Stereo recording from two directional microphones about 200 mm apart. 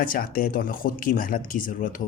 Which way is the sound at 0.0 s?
45° left (ahead or behind).